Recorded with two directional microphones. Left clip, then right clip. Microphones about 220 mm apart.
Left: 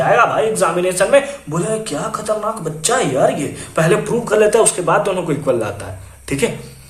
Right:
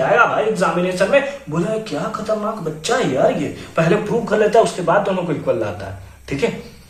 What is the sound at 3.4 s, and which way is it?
Speech, 40° left (ahead or behind).